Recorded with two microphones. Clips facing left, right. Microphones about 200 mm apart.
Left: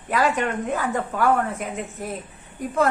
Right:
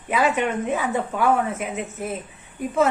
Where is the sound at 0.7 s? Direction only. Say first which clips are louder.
Right 1 dB; 15° right (ahead or behind).